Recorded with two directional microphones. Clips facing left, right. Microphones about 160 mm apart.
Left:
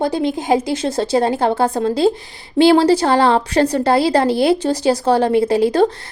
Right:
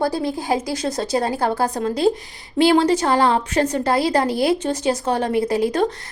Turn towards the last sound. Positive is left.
turn(degrees=30)  # may be behind; listen again after turning